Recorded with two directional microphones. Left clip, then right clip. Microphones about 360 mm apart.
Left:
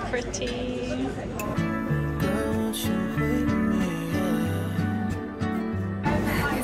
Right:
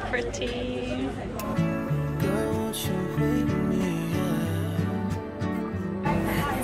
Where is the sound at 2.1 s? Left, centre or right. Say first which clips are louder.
Right 1 dB; centre.